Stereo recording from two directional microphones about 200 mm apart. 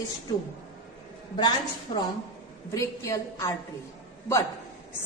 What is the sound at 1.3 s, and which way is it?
A woman's voice, 20° left (ahead or behind).